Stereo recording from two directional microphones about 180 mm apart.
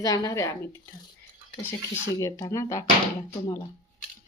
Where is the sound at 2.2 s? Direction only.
20° left (ahead or behind).